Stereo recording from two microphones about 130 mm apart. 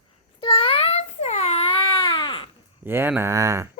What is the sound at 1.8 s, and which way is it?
Baby cry, 40° left (ahead or behind).